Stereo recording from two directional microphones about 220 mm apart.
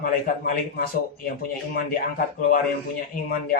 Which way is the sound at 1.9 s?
40° left (ahead or behind).